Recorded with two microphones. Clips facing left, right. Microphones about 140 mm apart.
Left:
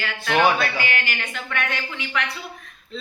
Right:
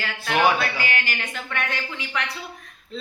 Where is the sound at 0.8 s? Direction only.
35° right (ahead or behind).